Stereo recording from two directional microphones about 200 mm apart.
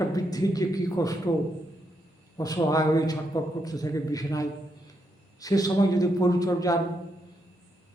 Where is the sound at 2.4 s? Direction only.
20° left (ahead or behind).